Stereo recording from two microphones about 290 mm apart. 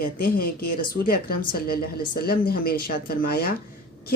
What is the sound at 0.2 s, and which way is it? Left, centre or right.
Speech, left.